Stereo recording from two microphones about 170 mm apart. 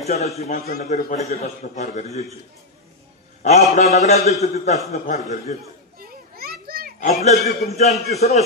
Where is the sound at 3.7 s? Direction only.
40° left (ahead or behind).